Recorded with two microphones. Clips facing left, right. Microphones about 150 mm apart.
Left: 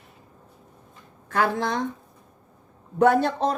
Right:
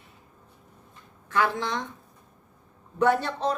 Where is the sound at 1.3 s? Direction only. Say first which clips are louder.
Left 2 dB; 45° left (ahead or behind).